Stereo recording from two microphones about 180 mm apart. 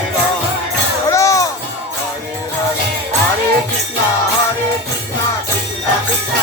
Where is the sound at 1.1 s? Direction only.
15° left (ahead or behind).